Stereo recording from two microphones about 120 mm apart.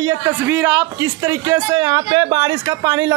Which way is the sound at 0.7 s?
25° right (ahead or behind).